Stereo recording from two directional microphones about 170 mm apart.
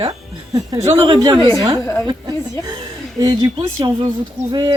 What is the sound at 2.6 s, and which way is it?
Speech, 20° right (ahead or behind).